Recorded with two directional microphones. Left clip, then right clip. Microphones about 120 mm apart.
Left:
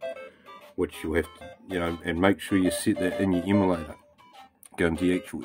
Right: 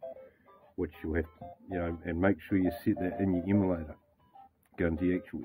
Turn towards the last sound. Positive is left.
turn(degrees=40)  # may be behind; listen again after turning